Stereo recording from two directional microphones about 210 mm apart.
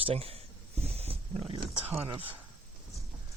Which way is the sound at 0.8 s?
30° right (ahead or behind).